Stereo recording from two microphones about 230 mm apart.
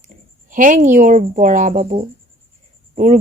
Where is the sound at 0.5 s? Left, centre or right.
Right.